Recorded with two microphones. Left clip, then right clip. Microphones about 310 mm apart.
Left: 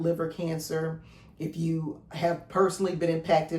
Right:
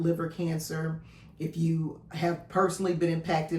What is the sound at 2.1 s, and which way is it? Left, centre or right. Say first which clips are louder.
Speech: left 2 dB; centre.